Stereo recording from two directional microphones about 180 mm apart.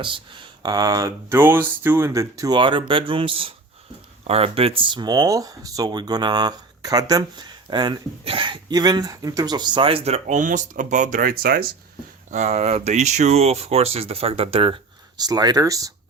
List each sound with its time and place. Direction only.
0.6 s speech: 20° right (ahead or behind); by 11.7 s 55° right (ahead or behind)
12.3 s speech: 40° right (ahead or behind); by 15.9 s 20° right (ahead or behind)